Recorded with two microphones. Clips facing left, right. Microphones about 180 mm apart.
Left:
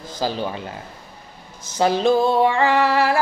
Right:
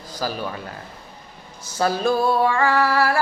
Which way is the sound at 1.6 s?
20° left (ahead or behind).